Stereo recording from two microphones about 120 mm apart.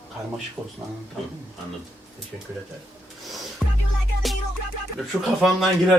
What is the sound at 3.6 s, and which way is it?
Music, 5° left (ahead or behind).